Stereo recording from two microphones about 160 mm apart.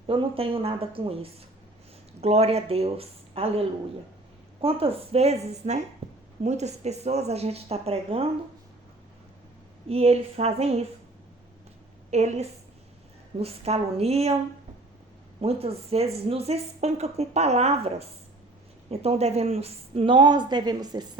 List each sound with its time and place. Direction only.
0.1 s speech: 35° right (ahead or behind)
6.0 s a sound: 35° right (ahead or behind)
6.4 s speech: 45° right (ahead or behind)
9.9 s speech: 40° right (ahead or behind)
12.1 s speech: 45° right (ahead or behind)
15.4 s speech: 40° right (ahead or behind)